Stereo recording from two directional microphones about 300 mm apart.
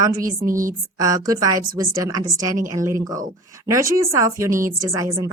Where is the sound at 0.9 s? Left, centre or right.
Centre.